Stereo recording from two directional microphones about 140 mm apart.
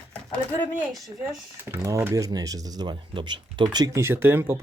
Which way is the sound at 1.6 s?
20° right (ahead or behind).